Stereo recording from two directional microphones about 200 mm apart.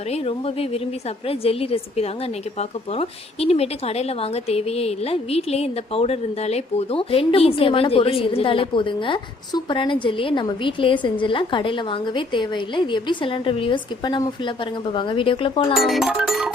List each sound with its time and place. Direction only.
0.1 s a woman's voice: 30° left (ahead or behind)
15.7 s music: centre (ahead or behind)